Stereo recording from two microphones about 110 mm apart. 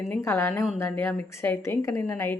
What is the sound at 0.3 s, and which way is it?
Speech, 20° left (ahead or behind).